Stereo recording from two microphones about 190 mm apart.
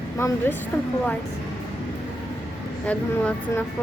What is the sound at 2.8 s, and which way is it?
Speech, 5° left (ahead or behind).